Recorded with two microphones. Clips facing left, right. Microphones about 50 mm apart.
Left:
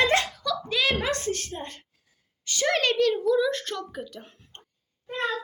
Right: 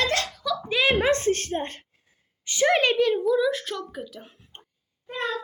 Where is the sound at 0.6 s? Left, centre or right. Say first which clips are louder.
Right 5 dB; right; by 4.6 s centre.